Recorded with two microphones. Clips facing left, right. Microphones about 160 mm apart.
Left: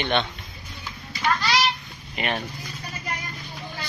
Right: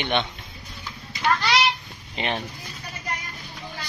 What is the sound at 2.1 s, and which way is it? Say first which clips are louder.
Speech: even; 20° right (ahead or behind).